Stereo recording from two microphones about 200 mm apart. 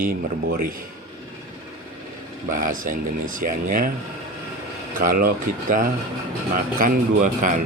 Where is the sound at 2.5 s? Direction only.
40° right (ahead or behind).